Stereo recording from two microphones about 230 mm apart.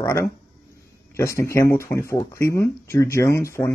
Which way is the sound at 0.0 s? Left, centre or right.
Centre.